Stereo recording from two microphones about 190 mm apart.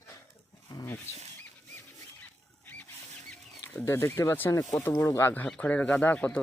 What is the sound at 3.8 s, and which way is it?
Speech, 15° left (ahead or behind).